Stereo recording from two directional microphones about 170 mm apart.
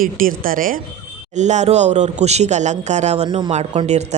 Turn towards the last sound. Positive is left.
turn(degrees=-40)  # may be behind; listen again after turning